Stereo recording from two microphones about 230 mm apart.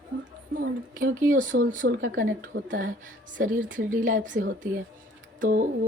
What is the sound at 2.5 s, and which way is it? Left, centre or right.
Speech, right.